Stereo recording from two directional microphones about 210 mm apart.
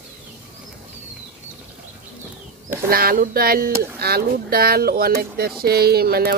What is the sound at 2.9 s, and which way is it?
Speech, 45° right (ahead or behind).